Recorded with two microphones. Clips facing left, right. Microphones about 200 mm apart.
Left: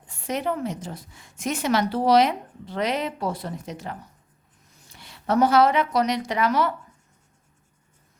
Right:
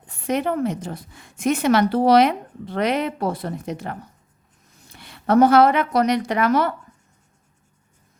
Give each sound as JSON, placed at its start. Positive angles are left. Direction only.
{"t": 0.1, "sound": "a woman's voice", "side_deg": -60}